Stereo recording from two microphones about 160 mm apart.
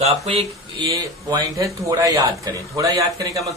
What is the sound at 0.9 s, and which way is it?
A man's voice, 20° right (ahead or behind).